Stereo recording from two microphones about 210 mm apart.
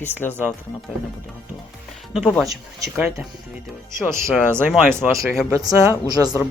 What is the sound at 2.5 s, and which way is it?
Speech, 15° right (ahead or behind).